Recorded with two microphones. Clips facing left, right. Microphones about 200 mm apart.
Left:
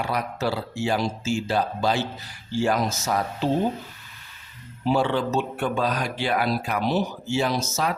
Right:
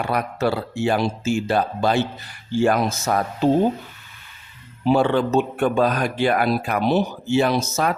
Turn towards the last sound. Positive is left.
turn(degrees=-55)  # may be behind; listen again after turning